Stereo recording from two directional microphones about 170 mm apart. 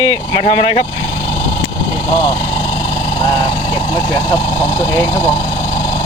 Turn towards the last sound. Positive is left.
turn(degrees=20)  # may be behind; listen again after turning